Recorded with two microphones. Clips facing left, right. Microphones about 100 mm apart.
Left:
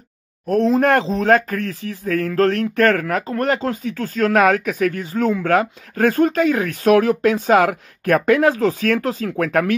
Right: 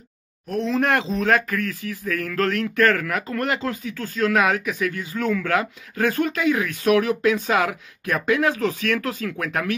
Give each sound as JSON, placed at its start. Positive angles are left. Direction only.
{"t": 0.5, "sound": "speech", "side_deg": 45}